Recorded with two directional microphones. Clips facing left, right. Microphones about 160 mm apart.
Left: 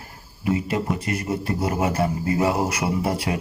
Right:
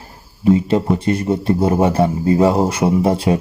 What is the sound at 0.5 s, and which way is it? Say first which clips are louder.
A man's voice: right 6 dB; 30° right (ahead or behind).